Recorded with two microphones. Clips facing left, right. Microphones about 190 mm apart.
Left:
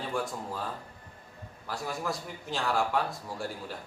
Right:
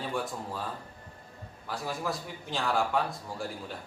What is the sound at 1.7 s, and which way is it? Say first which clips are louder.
A man's voice: even; centre (ahead or behind).